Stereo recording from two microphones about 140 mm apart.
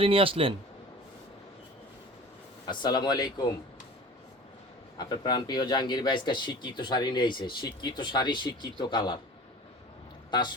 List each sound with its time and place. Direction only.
0.0 s a man's voice: 40° right (ahead or behind)
2.6 s speech: 35° left (ahead or behind)
4.9 s speech: 30° left (ahead or behind)